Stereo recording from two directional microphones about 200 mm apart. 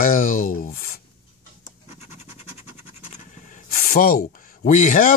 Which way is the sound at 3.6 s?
45° left (ahead or behind).